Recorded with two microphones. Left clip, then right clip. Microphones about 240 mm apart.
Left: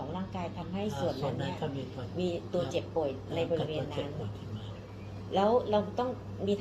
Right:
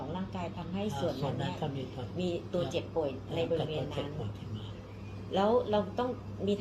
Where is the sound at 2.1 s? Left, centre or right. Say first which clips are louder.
Left 1 dB; centre.